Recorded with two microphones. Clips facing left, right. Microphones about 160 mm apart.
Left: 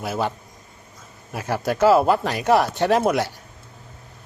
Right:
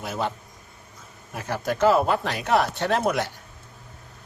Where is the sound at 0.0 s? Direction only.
5° left (ahead or behind).